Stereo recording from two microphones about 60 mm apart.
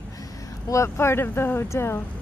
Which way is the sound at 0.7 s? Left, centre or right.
Left.